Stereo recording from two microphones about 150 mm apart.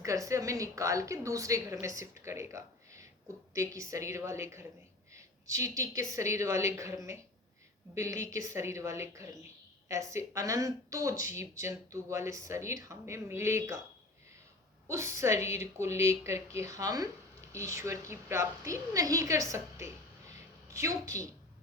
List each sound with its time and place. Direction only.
0.0 s speech: 20° right (ahead or behind)
14.8 s speech: 20° right (ahead or behind)
20.7 s speech: 20° right (ahead or behind)